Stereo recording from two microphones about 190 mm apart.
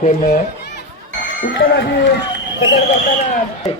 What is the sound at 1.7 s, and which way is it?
Speech, 65° left (ahead or behind).